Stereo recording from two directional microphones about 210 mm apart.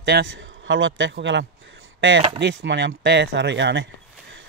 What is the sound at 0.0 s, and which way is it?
Speech, 55° right (ahead or behind).